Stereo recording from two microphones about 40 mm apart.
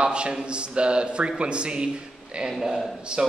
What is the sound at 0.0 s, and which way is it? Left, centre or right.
A man's voice, right.